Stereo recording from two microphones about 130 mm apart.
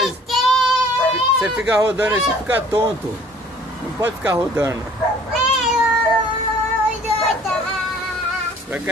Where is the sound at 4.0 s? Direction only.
15° right (ahead or behind).